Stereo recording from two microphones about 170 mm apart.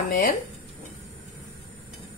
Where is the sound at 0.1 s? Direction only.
50° left (ahead or behind).